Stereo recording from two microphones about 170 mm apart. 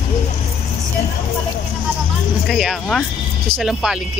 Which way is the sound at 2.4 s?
Centre (ahead or behind).